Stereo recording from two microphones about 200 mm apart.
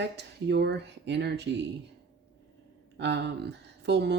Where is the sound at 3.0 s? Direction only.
60° right (ahead or behind).